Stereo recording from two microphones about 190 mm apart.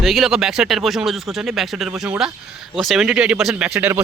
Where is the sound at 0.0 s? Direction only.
Centre (ahead or behind).